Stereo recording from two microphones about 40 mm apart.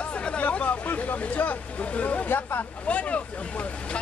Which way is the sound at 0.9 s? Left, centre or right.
Left.